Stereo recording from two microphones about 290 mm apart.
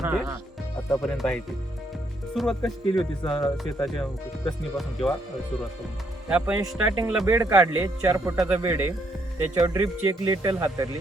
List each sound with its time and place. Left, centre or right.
0.0 s speech: centre
3.2 s speech: centre
3.6 s speech: centre
6.2 s speech: centre